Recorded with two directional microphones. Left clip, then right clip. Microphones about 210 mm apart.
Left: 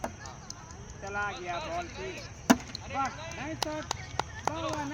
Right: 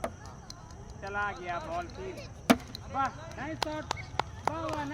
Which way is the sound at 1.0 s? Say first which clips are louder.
Even; 20° left (ahead or behind).